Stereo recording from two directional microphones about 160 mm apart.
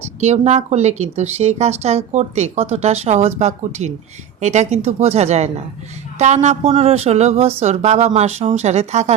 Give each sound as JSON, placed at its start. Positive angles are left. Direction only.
{"t": 0.2, "sound": "speech", "side_deg": -45}